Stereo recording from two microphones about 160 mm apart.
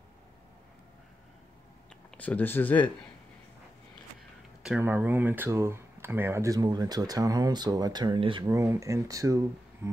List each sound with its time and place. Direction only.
2.0 s speech: 10° left (ahead or behind)
4.6 s speech: 10° right (ahead or behind); by 8.5 s 30° right (ahead or behind)
8.5 s speech: 20° right (ahead or behind)